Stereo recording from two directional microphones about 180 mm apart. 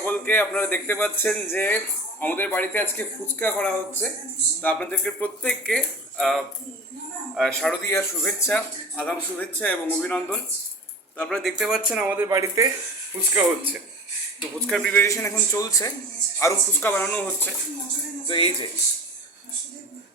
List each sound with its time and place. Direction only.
0.0 s speech: 10° left (ahead or behind)
7.9 s speech: 15° left (ahead or behind); by 13.8 s 10° right (ahead or behind)
14.7 s speech: 5° left (ahead or behind)
18.3 s speech: 30° left (ahead or behind)